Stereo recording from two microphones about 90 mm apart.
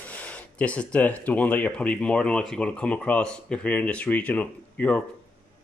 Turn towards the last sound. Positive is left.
turn(degrees=15)  # may be behind; listen again after turning